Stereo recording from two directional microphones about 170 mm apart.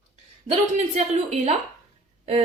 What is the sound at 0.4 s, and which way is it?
A child's voice, 40° right (ahead or behind).